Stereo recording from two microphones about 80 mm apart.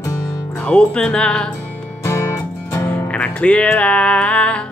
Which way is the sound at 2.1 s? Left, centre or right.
Left.